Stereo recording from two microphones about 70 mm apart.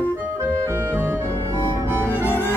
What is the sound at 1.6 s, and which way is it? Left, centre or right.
Music, left.